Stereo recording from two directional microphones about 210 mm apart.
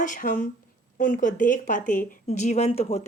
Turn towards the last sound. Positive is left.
turn(degrees=30)  # may be behind; listen again after turning